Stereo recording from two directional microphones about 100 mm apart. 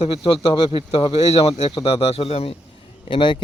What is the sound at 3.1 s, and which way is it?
Speech, 55° left (ahead or behind).